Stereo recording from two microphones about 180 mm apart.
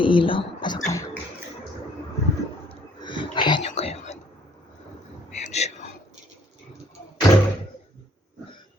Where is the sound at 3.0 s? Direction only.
25° left (ahead or behind).